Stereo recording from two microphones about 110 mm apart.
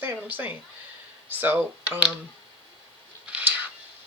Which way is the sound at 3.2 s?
15° right (ahead or behind).